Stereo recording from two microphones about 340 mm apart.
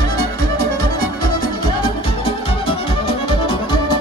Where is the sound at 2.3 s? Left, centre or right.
Centre.